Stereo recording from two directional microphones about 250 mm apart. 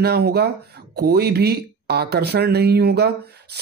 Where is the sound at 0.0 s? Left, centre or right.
Right.